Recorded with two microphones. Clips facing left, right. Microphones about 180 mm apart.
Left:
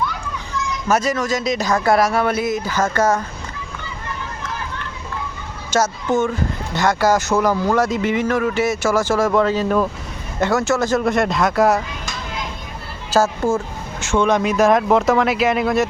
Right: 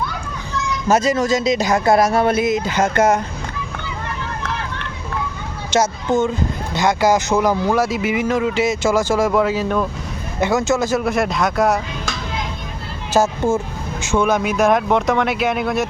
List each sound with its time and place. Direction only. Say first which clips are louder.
0.9 s speech: right 3 dB; 25° right (ahead or behind)
4.0 s run: right 2 dB; 70° right (ahead or behind)
5.7 s speech: right 1 dB; 15° right (ahead or behind); by 11.8 s centre (ahead or behind)
13.1 s speech: right 1 dB; 20° right (ahead or behind)
14.0 s speech: left 1 dB; 10° right (ahead or behind)